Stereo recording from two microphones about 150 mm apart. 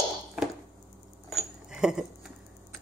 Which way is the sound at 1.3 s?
5° right (ahead or behind).